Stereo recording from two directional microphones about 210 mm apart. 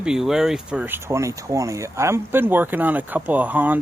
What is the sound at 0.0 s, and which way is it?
Speech, 5° right (ahead or behind).